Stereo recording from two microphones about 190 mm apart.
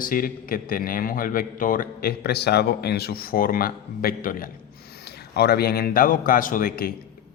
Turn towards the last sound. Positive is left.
turn(degrees=50)  # may be behind; listen again after turning